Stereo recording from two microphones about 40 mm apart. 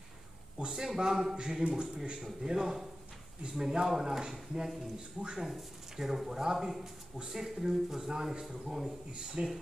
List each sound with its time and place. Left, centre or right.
0.7 s a man's voice: centre
2.4 s speech: centre
4.2 s a man's voice: centre
9.4 s a man's voice: right